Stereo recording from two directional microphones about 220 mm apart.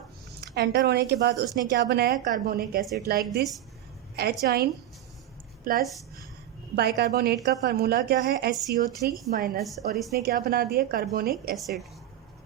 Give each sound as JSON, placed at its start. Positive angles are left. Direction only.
{"t": 0.4, "sound": "a woman's voice", "side_deg": -50}
{"t": 9.6, "sound": "a woman's voice", "side_deg": 0}
{"t": 10.2, "sound": "a woman's voice", "side_deg": -40}
{"t": 11.5, "sound": "a woman's voice", "side_deg": 0}